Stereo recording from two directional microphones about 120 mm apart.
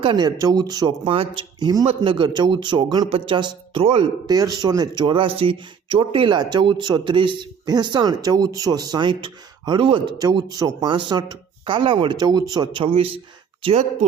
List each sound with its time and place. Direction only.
0.0 s speech: 35° right (ahead or behind)
1.5 s a man's voice: 35° right (ahead or behind)
1.8 s speech: 45° right (ahead or behind)
3.1 s speech: 55° right (ahead or behind)
3.3 s speech: 40° right (ahead or behind)
3.8 s speech: 50° right (ahead or behind)
4.3 s speech: 35° right (ahead or behind)
10.2 s speech: 30° right (ahead or behind)
10.8 s speech: 45° right (ahead or behind)